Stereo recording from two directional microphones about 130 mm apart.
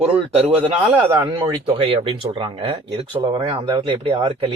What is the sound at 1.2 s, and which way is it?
Speech, 35° right (ahead or behind).